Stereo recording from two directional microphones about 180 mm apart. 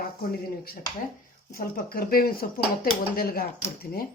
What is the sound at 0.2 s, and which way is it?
Speech, 55° left (ahead or behind).